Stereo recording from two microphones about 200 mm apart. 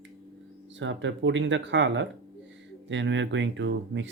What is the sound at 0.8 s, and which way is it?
Speech, 65° right (ahead or behind).